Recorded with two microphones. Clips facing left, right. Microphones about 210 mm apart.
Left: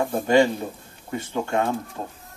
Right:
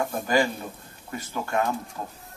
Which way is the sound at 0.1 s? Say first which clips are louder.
Left 6 dB; 25° left (ahead or behind).